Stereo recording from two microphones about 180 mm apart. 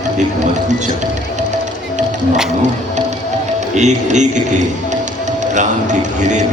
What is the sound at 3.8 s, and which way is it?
Speech, 40° right (ahead or behind).